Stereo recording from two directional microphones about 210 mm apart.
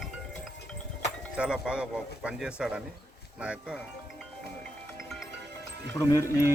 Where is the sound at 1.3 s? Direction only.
5° right (ahead or behind).